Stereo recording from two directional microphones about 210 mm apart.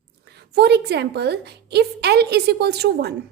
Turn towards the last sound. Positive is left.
turn(degrees=-50)  # may be behind; listen again after turning